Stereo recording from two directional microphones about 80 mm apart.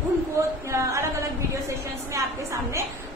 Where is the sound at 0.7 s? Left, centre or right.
Right.